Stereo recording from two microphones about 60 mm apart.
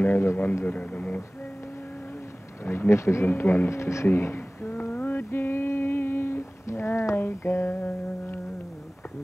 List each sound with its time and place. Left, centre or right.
0.0 s a sound: left
0.7 s speech: left
2.9 s speech: left
3.3 s speech: left
4.1 s a sound: left
7.7 s mantra: left